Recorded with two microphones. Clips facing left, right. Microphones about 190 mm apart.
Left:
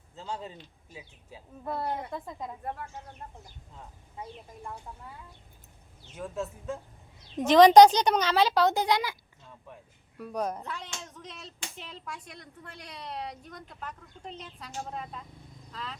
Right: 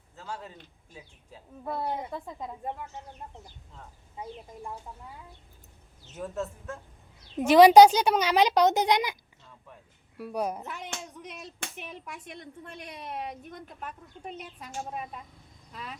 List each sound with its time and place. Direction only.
0.2 s a man's voice: 20° left (ahead or behind)
1.6 s a woman's voice: 10° right (ahead or behind)
6.1 s a woman's voice: centre (ahead or behind); by 9.1 s 20° right (ahead or behind)
10.2 s a child's voice: 10° right (ahead or behind)